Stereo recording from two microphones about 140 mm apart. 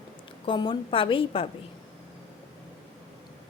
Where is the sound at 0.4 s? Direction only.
35° left (ahead or behind).